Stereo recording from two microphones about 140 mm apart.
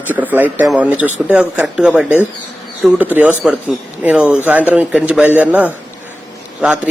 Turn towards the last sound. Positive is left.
turn(degrees=-10)  # may be behind; listen again after turning